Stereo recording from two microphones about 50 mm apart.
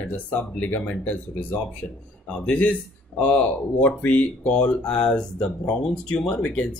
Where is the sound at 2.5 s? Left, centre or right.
Left.